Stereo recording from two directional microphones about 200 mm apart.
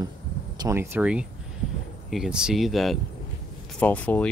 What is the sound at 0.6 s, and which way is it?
Speech, 15° right (ahead or behind).